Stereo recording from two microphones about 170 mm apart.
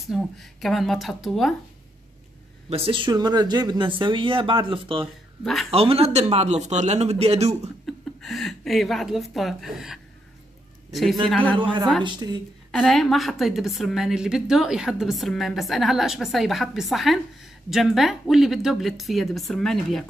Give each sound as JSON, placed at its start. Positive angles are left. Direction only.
{"t": 0.0, "sound": "a woman's voice", "side_deg": 0}
{"t": 2.7, "sound": "speech", "side_deg": -30}
{"t": 5.4, "sound": "a woman's voice", "side_deg": 0}
{"t": 5.7, "sound": "speech", "side_deg": -35}
{"t": 7.8, "sound": "a woman's voice", "side_deg": 0}
{"t": 12.0, "sound": "speech", "side_deg": -25}
{"t": 12.7, "sound": "a woman's voice", "side_deg": 0}